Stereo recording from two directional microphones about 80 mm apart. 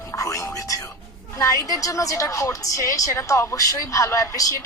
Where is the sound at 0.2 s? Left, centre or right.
Left.